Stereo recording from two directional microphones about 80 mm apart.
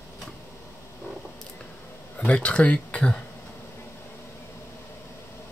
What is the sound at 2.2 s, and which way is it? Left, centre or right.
Speech, centre.